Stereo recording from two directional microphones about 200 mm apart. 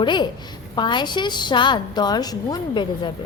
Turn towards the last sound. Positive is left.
turn(degrees=25)  # may be behind; listen again after turning